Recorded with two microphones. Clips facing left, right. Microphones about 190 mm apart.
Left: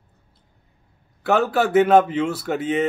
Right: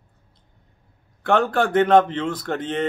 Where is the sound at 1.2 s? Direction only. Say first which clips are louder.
Even; 5° left (ahead or behind).